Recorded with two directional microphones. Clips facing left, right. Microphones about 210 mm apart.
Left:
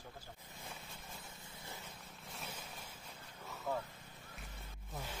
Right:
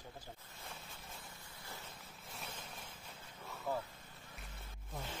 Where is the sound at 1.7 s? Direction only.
Centre (ahead or behind).